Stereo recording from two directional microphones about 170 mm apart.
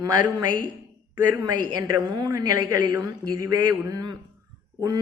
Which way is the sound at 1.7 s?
20° right (ahead or behind).